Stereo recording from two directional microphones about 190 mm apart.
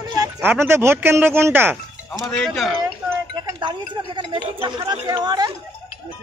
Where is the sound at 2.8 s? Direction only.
20° right (ahead or behind).